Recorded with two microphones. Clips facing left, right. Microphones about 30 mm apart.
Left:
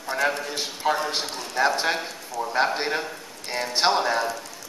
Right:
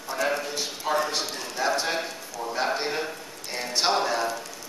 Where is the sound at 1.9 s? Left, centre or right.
Centre.